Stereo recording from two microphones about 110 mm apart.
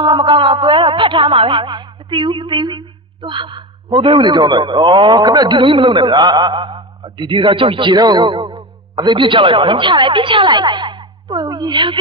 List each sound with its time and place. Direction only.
0.0 s music: 45° right (ahead or behind)
5.7 s a man's voice: 50° right (ahead or behind)